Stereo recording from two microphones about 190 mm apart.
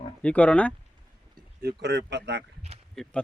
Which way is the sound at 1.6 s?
60° right (ahead or behind).